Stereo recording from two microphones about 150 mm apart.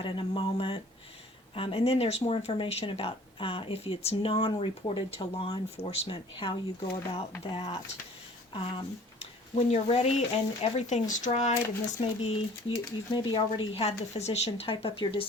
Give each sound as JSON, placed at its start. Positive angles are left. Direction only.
{"t": 0.0, "sound": "a sound", "side_deg": 35}
{"t": 1.5, "sound": "speech", "side_deg": 35}
{"t": 13.1, "sound": "speech", "side_deg": 35}